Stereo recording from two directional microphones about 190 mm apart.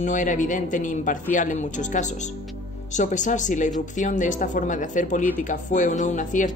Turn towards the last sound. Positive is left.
turn(degrees=40)  # may be behind; listen again after turning